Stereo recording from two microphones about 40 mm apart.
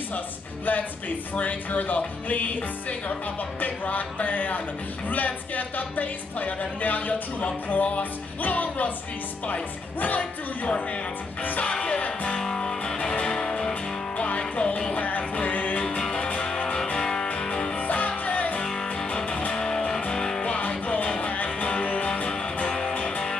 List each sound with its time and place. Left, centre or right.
0.7 s speech: left
11.6 s music: left
12.0 s music: left
12.5 s music: centre
14.1 s music: left
16.2 s music: left
16.4 s music: left
17.7 s music: left
18.6 s music: centre
19.0 s music: left
20.1 s music: centre
20.5 s music: left
22.7 s music: centre
23.0 s music: left